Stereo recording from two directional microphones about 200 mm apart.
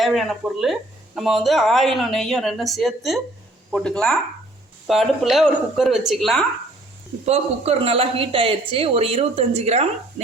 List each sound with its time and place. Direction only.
0.0 s speech: centre (ahead or behind)
7.3 s a woman's voice: 30° right (ahead or behind)